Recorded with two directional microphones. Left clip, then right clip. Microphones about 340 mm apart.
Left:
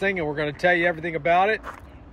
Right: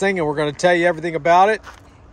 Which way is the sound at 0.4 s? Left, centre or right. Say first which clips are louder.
Right 4 dB; right.